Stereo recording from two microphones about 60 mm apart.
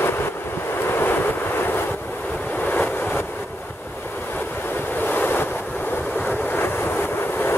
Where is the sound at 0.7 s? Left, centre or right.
Left.